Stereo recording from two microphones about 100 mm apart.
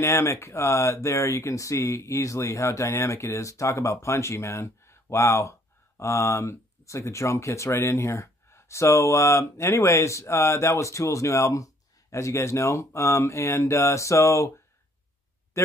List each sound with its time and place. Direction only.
0.0 s speech: 25° left (ahead or behind)
15.5 s speech: 30° left (ahead or behind)